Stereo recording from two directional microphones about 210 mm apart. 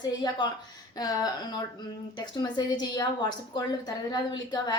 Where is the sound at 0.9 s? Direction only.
20° left (ahead or behind).